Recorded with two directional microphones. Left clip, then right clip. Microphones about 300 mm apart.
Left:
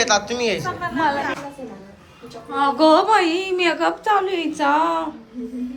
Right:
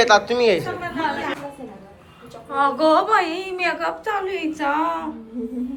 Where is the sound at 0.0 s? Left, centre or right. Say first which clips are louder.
Right 4 dB; centre.